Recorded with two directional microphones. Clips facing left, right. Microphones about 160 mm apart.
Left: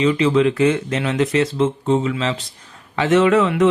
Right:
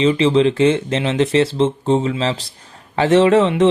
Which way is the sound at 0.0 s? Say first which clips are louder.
Right 2 dB; 25° right (ahead or behind).